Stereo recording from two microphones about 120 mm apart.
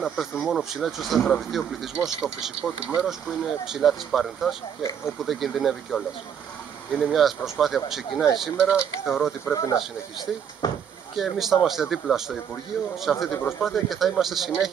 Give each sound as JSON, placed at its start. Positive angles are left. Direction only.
{"t": 0.0, "sound": "speech", "side_deg": 0}
{"t": 9.5, "sound": "speech", "side_deg": 30}
{"t": 11.1, "sound": "speech", "side_deg": 0}
{"t": 13.3, "sound": "speech", "side_deg": 20}
{"t": 13.6, "sound": "speech", "side_deg": 0}